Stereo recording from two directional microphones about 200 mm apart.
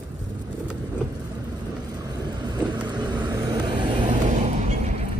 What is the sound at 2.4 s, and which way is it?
Vehicle, 20° right (ahead or behind).